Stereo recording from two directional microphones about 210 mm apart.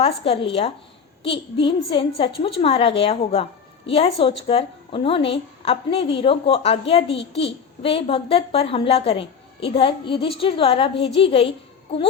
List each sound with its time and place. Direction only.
0.0 s a woman's voice: 25° left (ahead or behind)